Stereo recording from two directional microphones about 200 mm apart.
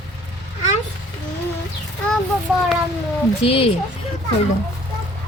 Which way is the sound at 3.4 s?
30° left (ahead or behind).